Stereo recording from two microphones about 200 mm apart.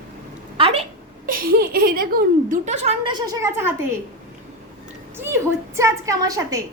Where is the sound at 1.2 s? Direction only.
45° right (ahead or behind); by 3.9 s 10° right (ahead or behind).